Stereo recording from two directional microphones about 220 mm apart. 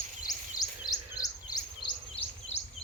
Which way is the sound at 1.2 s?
20° left (ahead or behind).